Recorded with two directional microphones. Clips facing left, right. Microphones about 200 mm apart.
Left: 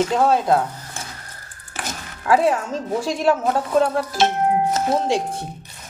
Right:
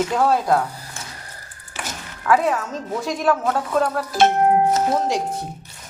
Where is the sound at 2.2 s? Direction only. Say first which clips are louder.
Left 1 dB; 30° left (ahead or behind).